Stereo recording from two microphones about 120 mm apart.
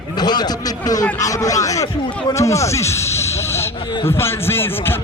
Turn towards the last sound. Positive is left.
turn(degrees=20)  # may be behind; listen again after turning